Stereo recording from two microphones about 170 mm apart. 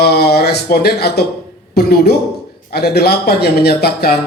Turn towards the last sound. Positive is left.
turn(degrees=65)  # may be behind; listen again after turning